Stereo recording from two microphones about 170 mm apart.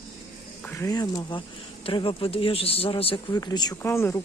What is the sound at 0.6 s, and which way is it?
Speech, 15° left (ahead or behind).